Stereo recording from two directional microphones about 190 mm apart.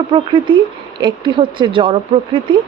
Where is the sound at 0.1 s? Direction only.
25° right (ahead or behind).